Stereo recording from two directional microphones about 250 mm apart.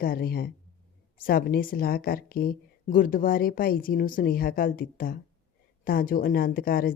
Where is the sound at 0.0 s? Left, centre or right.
Left.